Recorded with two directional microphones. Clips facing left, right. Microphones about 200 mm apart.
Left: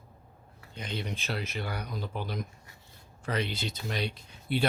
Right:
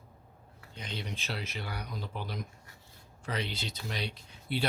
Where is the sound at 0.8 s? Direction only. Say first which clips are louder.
Left 4 dB; 55° left (ahead or behind).